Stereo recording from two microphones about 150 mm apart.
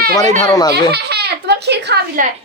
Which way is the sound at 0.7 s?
90° right.